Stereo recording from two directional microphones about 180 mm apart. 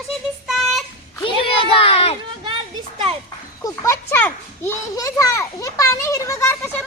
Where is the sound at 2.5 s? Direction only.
30° right (ahead or behind).